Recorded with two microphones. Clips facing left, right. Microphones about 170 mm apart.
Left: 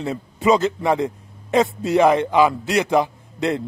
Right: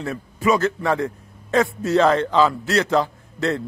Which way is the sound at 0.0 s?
20° left (ahead or behind).